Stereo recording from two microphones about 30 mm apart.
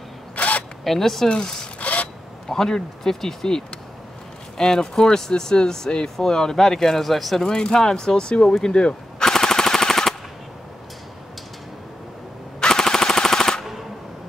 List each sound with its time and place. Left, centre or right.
0.4 s single-lens reflex camera: left
0.8 s speech: centre
1.8 s a sound: left
2.5 s speech: centre
7.0 s speech: centre
7.4 s speech: left
9.2 s machine gun: centre
12.5 s machine gun: left